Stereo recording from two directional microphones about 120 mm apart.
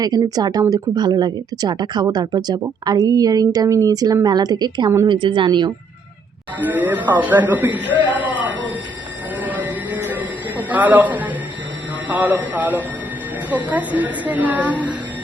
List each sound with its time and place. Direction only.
0.0 s speech: 35° right (ahead or behind)
6.6 s a man's voice: 15° right (ahead or behind)
9.4 s a sound: 15° right (ahead or behind)
12.0 s a woman's voice: 15° right (ahead or behind)